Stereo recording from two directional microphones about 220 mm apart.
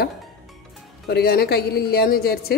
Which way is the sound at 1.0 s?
45° left (ahead or behind).